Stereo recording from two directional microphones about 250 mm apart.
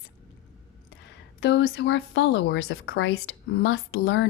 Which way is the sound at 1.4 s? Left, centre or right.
Left.